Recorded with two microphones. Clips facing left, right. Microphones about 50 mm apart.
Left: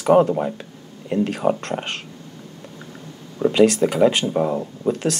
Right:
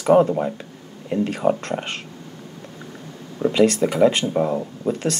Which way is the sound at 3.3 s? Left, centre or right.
Centre.